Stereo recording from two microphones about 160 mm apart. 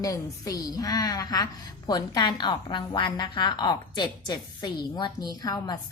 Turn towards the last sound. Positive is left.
turn(degrees=25)  # may be behind; listen again after turning